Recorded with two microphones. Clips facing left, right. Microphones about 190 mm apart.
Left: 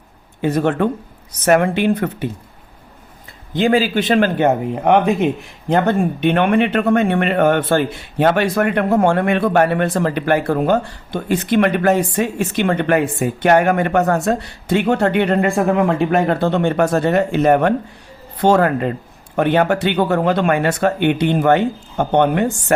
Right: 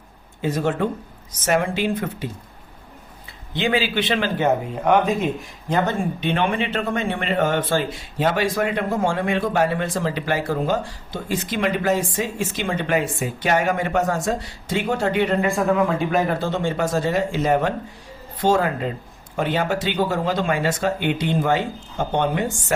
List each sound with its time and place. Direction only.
0.4 s speech: 60° left (ahead or behind)
3.5 s speech: 45° left (ahead or behind); by 22.7 s 65° left (ahead or behind)